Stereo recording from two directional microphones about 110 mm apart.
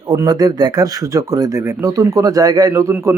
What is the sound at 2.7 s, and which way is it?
Speech, 25° right (ahead or behind).